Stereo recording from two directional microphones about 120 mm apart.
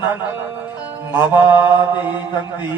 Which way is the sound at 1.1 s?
15° right (ahead or behind).